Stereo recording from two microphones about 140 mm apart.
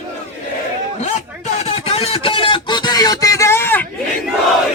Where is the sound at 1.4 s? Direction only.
50° left (ahead or behind); by 3.8 s 15° left (ahead or behind).